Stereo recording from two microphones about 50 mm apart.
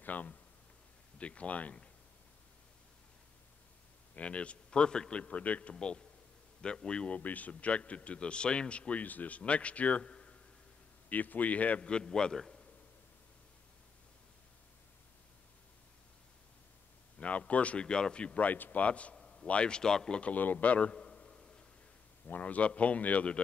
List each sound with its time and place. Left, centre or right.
0.0 s a sound: left
1.1 s speech: left
4.1 s a man's voice: left
11.1 s a man's voice: left; by 12.6 s centre
17.2 s a man's voice: left
19.1 s a sound: centre
19.4 s a man's voice: left
20.2 s a man's voice: left
20.9 s a sound: centre
22.2 s a man's voice: left